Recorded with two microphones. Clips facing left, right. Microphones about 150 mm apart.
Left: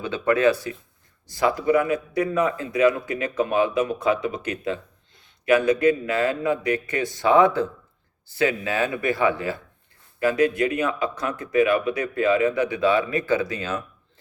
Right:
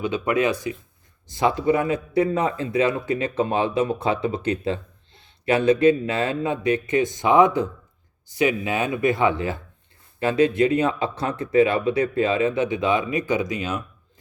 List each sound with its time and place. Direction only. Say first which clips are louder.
0.0 s speech: left 2 dB; 15° right (ahead or behind)